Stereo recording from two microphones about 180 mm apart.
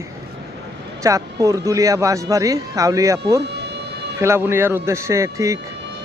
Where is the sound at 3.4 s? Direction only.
70° right (ahead or behind).